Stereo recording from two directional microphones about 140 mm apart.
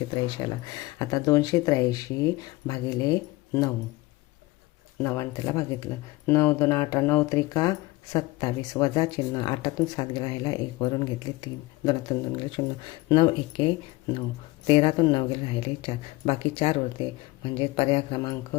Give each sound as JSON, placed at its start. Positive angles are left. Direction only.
{"t": 0.4, "sound": "speech", "side_deg": 25}
{"t": 5.0, "sound": "speech", "side_deg": 20}